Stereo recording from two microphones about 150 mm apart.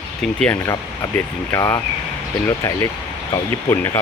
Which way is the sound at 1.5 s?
20° left (ahead or behind).